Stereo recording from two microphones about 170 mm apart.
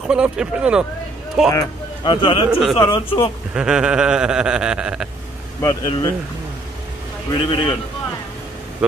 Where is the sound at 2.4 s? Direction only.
5° right (ahead or behind).